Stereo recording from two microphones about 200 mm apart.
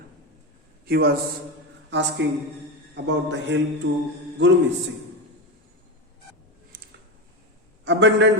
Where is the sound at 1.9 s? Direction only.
65° right (ahead or behind).